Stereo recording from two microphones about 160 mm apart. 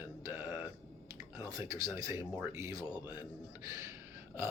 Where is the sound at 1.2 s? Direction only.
20° right (ahead or behind).